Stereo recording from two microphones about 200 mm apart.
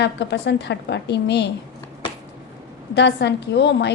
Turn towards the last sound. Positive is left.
turn(degrees=60)  # may be behind; listen again after turning